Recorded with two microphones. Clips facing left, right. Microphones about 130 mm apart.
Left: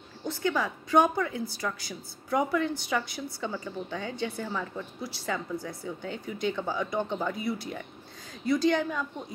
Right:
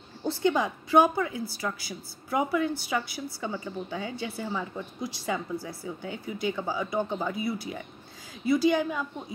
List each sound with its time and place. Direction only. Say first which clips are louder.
0.2 s a woman's voice: right 3 dB; 25° right (ahead or behind)
0.7 s a woman's voice: left 1 dB; 5° right (ahead or behind)